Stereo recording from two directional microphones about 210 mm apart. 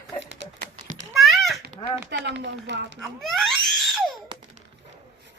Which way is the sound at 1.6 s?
50° right (ahead or behind).